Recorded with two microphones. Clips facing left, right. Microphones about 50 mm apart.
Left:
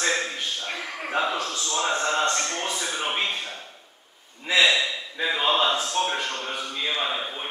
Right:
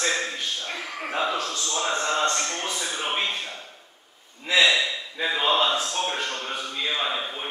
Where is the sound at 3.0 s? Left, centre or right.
Centre.